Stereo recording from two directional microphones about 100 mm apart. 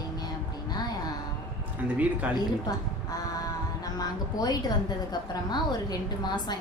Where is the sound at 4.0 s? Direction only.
40° left (ahead or behind).